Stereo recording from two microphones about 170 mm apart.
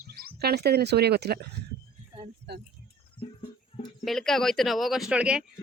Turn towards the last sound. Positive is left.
turn(degrees=-5)  # may be behind; listen again after turning